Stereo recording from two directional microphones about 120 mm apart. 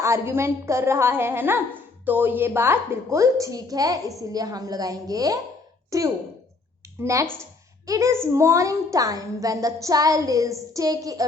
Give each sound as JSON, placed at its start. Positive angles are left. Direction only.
{"t": 0.0, "sound": "a woman's voice", "side_deg": -25}